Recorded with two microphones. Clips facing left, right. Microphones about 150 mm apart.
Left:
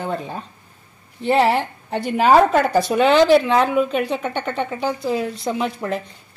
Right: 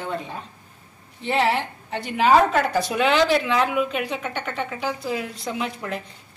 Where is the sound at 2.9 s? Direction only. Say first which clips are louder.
Left 8 dB; 35° left (ahead or behind).